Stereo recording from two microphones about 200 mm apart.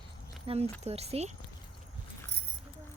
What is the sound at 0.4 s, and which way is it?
Speech, 30° right (ahead or behind).